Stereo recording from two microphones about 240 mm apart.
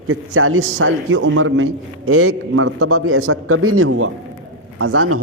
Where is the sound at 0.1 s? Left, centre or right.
Right.